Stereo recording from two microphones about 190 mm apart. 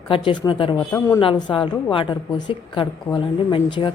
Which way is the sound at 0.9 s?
15° left (ahead or behind).